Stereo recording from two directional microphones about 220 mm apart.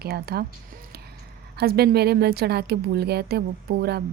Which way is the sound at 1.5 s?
45° right (ahead or behind).